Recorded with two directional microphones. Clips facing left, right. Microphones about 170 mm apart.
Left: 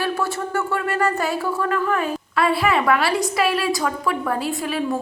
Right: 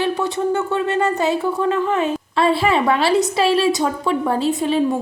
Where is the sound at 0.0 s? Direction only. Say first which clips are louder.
Right 4 dB; 20° right (ahead or behind).